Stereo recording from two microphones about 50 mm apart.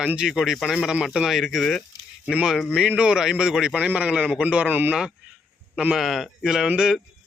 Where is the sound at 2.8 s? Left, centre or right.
Centre.